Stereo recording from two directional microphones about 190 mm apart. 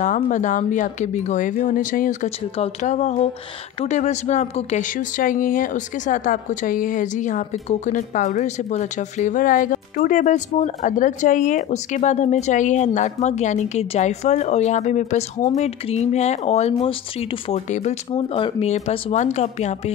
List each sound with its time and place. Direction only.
0.0 s speech: 40° left (ahead or behind)